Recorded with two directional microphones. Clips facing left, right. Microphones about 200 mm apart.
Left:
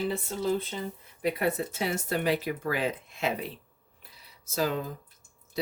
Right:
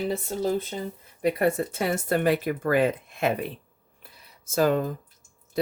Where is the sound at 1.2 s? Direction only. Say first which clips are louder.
Right 5 dB; 50° right (ahead or behind).